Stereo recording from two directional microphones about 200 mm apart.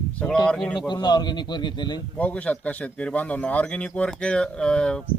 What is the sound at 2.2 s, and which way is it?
A man's voice, 5° left (ahead or behind).